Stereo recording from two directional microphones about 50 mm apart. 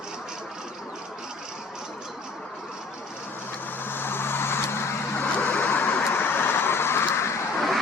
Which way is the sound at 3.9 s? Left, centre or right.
Left.